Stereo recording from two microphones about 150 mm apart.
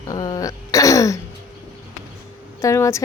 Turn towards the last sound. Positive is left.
turn(degrees=20)  # may be behind; listen again after turning